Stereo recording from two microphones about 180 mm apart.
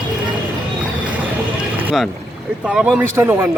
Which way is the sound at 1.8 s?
5° right (ahead or behind).